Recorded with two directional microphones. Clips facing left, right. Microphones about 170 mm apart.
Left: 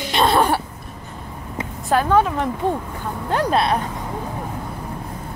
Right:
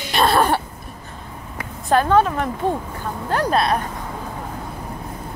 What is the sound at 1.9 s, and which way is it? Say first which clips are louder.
Speech: right 1 dB; 10° left (ahead or behind).